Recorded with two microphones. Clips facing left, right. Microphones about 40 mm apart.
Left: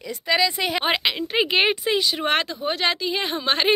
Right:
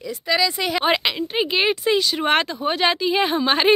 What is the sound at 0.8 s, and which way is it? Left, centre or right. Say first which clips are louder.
Speech: right 3 dB; centre.